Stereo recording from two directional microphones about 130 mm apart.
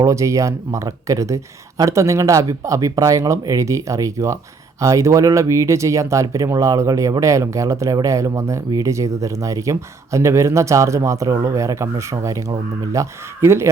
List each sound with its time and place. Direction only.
0.0 s speech: 25° right (ahead or behind)